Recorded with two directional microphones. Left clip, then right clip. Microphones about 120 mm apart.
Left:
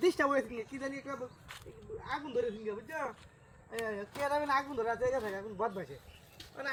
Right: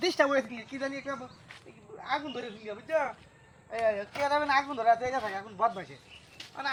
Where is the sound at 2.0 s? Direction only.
20° right (ahead or behind).